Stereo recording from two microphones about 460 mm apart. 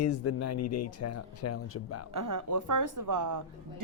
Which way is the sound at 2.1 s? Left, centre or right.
Right.